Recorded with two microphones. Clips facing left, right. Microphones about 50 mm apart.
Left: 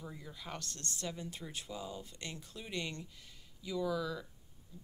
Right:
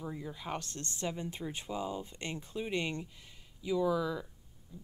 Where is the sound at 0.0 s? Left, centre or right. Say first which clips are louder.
Right 7 dB; centre.